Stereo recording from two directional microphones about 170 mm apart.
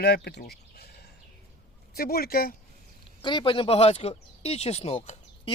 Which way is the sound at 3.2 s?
30° left (ahead or behind).